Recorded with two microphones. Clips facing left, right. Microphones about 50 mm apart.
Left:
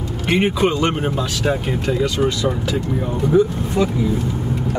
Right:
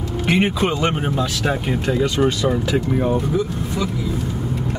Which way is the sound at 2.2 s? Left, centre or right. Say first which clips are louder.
Right 1 dB; right.